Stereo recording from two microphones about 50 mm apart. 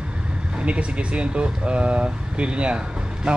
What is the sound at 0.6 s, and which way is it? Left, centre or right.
Speech, right.